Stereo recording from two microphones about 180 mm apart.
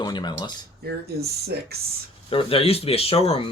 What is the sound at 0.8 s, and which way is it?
Speech, 60° right (ahead or behind).